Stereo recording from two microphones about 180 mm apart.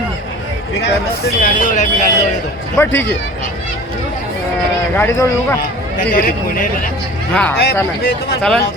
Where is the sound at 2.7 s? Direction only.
10° left (ahead or behind).